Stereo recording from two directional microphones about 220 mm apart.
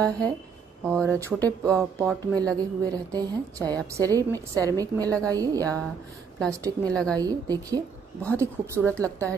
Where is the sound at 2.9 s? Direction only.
15° right (ahead or behind).